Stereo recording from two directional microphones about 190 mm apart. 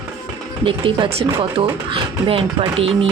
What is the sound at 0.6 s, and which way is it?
Speech, 25° right (ahead or behind).